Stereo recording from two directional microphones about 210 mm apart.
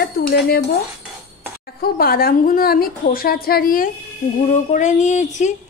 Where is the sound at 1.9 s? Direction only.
45° left (ahead or behind).